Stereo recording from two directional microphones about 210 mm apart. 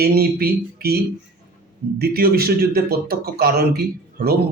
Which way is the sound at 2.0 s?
45° right (ahead or behind).